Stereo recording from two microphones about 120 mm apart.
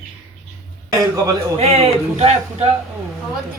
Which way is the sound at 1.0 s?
30° right (ahead or behind).